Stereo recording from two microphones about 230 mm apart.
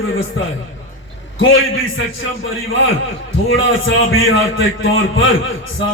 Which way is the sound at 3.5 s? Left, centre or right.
Left.